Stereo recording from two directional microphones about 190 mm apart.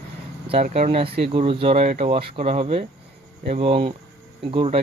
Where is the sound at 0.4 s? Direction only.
30° right (ahead or behind).